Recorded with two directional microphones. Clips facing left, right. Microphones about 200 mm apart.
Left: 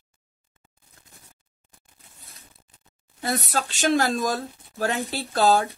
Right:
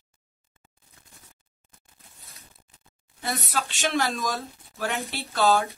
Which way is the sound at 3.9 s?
35° left (ahead or behind).